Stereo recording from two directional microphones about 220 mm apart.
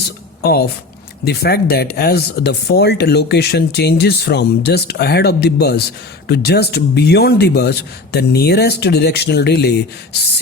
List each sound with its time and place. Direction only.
0.4 s speech: 45° left (ahead or behind)